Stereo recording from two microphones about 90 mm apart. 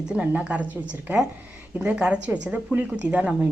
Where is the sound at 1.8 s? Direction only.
15° right (ahead or behind).